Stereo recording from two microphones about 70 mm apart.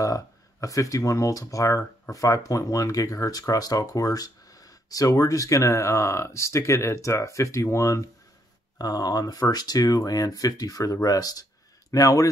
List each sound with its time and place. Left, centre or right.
0.0 s speech: left
8.7 s speech: left
11.9 s speech: left